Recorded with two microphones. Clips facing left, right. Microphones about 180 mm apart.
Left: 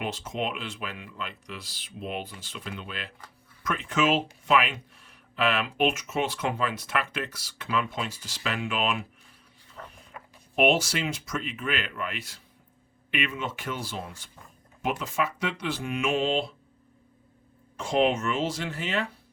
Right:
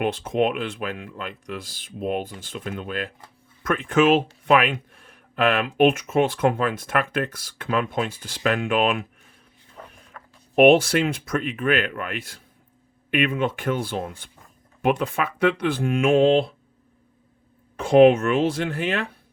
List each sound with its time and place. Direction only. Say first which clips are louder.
0.0 s speech: right 9 dB; 55° right (ahead or behind)
10.1 s a sound: left 1 dB; 10° left (ahead or behind)
10.5 s speech: right 9 dB; 55° right (ahead or behind)
17.7 s speech: right 10 dB; 60° right (ahead or behind)